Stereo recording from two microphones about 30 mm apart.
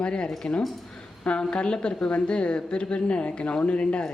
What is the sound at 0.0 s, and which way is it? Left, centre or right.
Speech, left.